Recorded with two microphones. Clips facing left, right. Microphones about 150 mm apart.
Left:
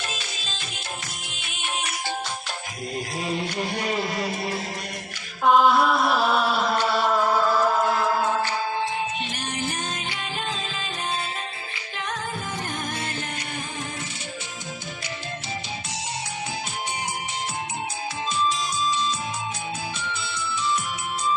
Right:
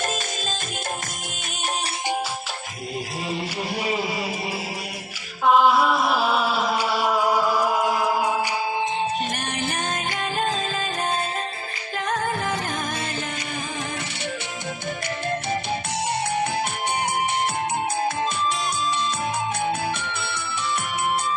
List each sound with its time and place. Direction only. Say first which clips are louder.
3.2 s music: left 2 dB; 5° right (ahead or behind)
5.5 s chant: right 1 dB; 5° right (ahead or behind)
16.3 s music: right 8 dB; 60° right (ahead or behind)